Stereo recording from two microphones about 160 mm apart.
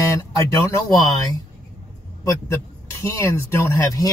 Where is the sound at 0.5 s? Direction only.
20° left (ahead or behind).